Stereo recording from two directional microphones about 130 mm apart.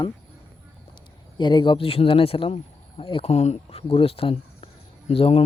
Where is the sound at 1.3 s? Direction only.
35° left (ahead or behind).